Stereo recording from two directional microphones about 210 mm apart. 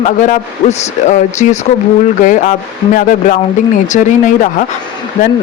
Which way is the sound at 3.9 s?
35° left (ahead or behind).